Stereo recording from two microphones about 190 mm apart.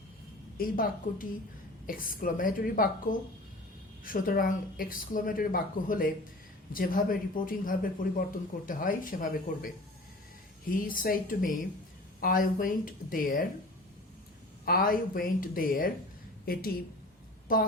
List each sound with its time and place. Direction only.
0.5 s speech: 50° left (ahead or behind)
10.8 s speech: 50° left (ahead or behind)
14.6 s speech: 50° left (ahead or behind)